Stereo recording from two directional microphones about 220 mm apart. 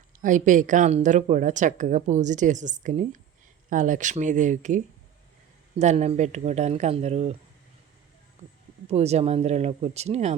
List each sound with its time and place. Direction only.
0.2 s speech: 35° right (ahead or behind)
5.8 s speech: 30° right (ahead or behind)
8.9 s speech: 30° right (ahead or behind)